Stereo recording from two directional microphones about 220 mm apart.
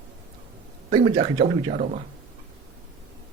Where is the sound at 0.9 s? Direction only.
25° right (ahead or behind).